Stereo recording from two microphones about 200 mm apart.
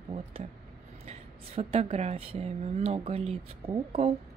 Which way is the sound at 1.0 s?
30° right (ahead or behind).